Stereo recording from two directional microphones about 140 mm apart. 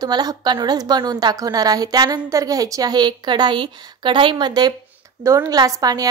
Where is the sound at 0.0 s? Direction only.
30° right (ahead or behind).